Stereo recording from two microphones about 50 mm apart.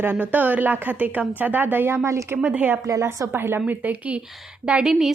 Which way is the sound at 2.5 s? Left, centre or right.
Right.